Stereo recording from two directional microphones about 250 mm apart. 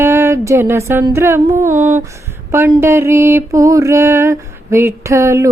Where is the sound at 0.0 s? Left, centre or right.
Centre.